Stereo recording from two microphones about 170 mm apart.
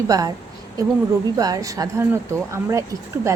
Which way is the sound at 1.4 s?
20° right (ahead or behind).